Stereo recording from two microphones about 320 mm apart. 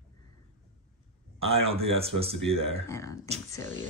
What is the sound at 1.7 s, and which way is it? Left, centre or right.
Speech, centre.